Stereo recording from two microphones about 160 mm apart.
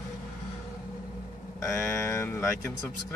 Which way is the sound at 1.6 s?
15° left (ahead or behind).